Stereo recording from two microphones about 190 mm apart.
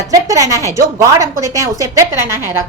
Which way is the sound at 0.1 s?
15° right (ahead or behind).